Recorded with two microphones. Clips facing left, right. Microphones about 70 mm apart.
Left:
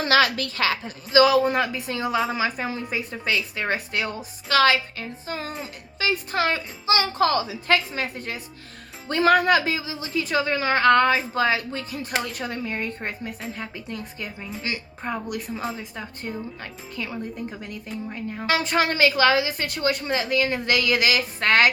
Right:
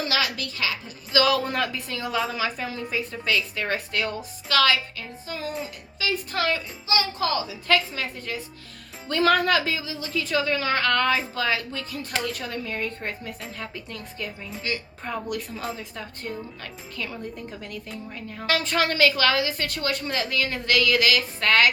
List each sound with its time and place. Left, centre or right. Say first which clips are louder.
0.0 s a woman's voice: left 7 dB; left
1.2 s a woman's voice: left 5 dB; centre
6.9 s a woman's voice: left 4 dB; left
7.7 s a woman's voice: left 1 dB; left; by 17.9 s centre
18.1 s a woman's voice: left 2 dB; left